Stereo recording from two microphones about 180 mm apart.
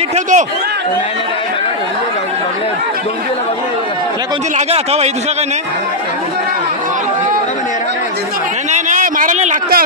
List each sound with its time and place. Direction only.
0.1 s a man's voice: 40° right (ahead or behind)
4.6 s speech: 35° right (ahead or behind)
8.7 s a sound: 45° right (ahead or behind)